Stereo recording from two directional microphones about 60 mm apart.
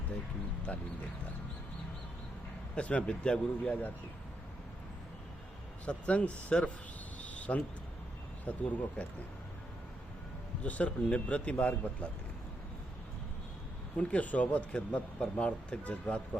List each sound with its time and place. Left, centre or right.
0.7 s a man's voice: left
2.7 s a man's voice: centre
5.8 s a man's voice: left
7.2 s a sound: left
8.4 s a man's voice: left
10.6 s a man's voice: left
13.9 s a man's voice: left